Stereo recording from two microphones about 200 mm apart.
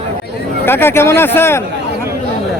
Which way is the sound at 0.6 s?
10° left (ahead or behind).